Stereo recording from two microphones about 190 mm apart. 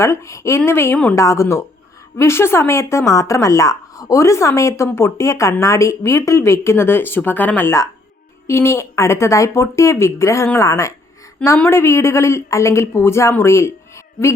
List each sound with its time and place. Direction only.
0.0 s speech: 15° left (ahead or behind)